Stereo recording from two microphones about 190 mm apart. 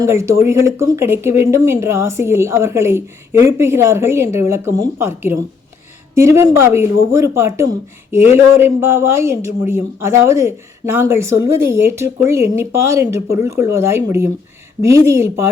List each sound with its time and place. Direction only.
0.0 s a woman's voice: 15° right (ahead or behind)